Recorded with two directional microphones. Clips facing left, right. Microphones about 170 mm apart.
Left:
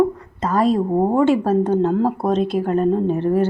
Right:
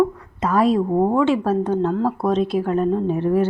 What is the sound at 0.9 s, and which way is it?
Speech, 10° left (ahead or behind).